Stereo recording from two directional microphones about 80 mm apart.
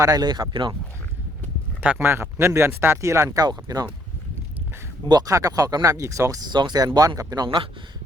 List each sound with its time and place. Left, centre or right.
0.0 s speech: right
0.5 s speech: right
2.0 s speech: right
5.2 s speech: right
6.5 s speech: right
6.8 s speech: right
7.4 s a man's voice: right